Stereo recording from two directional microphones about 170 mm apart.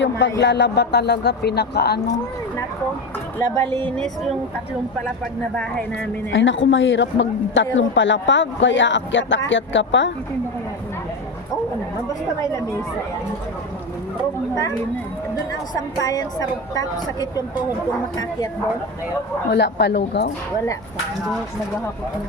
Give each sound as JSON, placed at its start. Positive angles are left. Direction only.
{"t": 0.0, "sound": "speech", "side_deg": 90}
{"t": 3.3, "sound": "speech", "side_deg": 10}
{"t": 5.5, "sound": "speech", "side_deg": 5}
{"t": 6.3, "sound": "a woman's voice", "side_deg": 90}
{"t": 16.0, "sound": "a woman's voice", "side_deg": 20}
{"t": 19.5, "sound": "speech", "side_deg": 80}